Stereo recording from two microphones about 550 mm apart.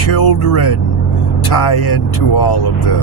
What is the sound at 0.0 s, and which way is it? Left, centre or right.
Speech, left.